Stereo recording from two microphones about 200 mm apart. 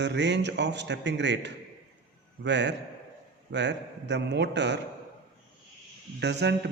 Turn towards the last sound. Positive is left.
turn(degrees=-55)  # may be behind; listen again after turning